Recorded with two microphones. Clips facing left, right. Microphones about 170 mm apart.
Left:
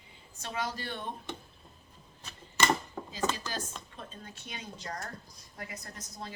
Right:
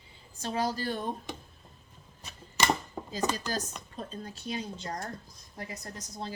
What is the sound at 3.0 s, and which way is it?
Chopping, 15° right (ahead or behind).